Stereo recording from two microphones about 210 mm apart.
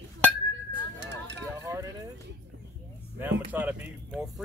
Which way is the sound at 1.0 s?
60° right (ahead or behind).